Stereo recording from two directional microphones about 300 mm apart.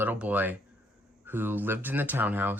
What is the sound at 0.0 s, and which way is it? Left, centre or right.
Speech, centre.